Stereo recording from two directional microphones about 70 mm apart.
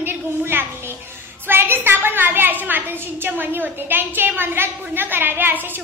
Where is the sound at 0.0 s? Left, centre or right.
Right.